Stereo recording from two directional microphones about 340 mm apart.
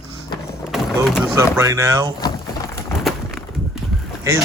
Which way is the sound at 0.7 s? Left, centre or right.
Centre.